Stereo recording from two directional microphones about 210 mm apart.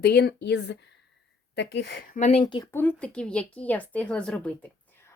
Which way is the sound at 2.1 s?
35° left (ahead or behind).